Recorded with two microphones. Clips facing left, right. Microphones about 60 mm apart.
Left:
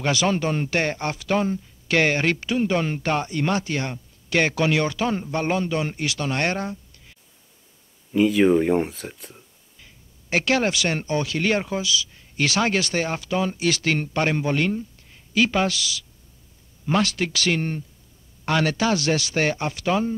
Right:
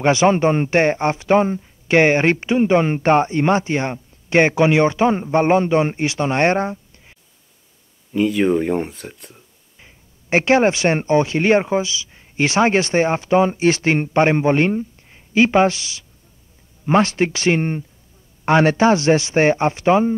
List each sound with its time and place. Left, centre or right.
0.0 s speech: right
8.1 s speech: centre
9.8 s speech: right